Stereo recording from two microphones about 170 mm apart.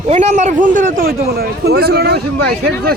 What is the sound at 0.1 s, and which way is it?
A man's voice, 40° right (ahead or behind).